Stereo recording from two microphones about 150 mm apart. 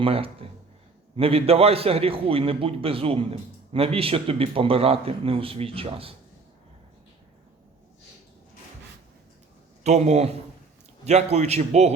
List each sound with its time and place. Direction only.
0.0 s a man's voice: 40° right (ahead or behind)
9.8 s a man's voice: 50° right (ahead or behind)